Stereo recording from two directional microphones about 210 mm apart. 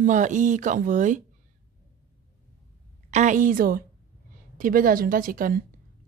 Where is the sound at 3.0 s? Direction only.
35° right (ahead or behind).